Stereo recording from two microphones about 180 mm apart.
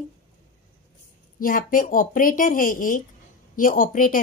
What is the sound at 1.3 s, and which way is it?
A woman's voice, 50° left (ahead or behind).